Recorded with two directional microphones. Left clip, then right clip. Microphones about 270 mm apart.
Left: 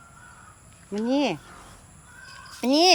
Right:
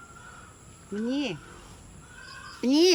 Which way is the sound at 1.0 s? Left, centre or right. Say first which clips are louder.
Left 7 dB; centre.